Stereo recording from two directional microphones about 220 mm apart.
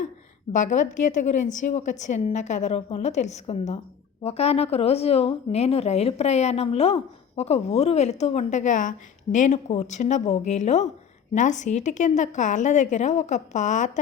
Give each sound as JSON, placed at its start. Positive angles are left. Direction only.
{"t": 0.5, "sound": "a woman's voice", "side_deg": 35}